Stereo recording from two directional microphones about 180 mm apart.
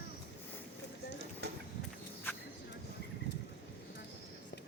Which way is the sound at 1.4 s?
70° right (ahead or behind).